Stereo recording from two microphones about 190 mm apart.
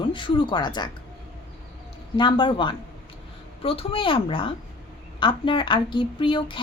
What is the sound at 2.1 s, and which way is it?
A woman's voice, 25° left (ahead or behind).